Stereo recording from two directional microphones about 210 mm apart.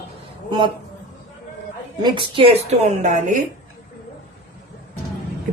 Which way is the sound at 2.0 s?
20° right (ahead or behind).